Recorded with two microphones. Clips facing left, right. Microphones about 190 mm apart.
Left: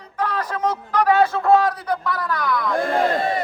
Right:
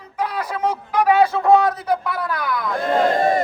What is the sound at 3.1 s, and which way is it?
Crowd, 45° right (ahead or behind).